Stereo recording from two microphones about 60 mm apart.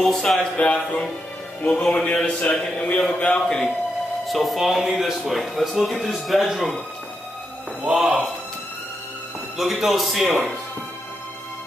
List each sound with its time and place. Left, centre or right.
0.0 s a man's voice: centre; by 3.1 s left
3.1 s a man's voice: centre
7.8 s speech: centre
9.6 s speech: centre